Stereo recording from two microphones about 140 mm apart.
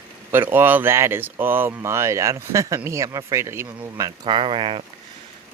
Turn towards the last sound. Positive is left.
turn(degrees=-40)  # may be behind; listen again after turning